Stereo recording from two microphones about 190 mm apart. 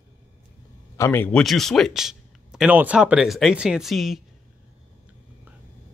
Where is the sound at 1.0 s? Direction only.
10° left (ahead or behind).